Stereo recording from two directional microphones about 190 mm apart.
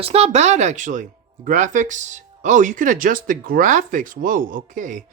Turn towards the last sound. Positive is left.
turn(degrees=-45)  # may be behind; listen again after turning